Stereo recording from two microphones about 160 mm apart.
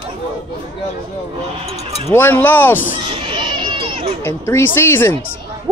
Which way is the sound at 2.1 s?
15° left (ahead or behind).